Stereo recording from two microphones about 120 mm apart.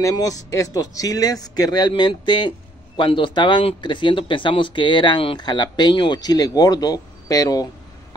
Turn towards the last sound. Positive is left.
turn(degrees=30)  # may be behind; listen again after turning